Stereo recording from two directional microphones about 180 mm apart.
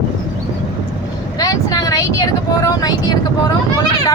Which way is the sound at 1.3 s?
20° left (ahead or behind).